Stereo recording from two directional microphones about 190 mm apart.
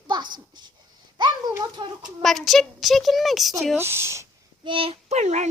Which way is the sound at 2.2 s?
Centre (ahead or behind).